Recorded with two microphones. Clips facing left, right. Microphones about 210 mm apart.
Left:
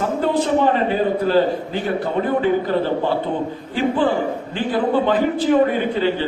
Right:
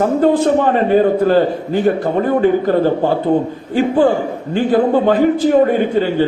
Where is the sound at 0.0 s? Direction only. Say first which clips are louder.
Right 7 dB; 50° right (ahead or behind).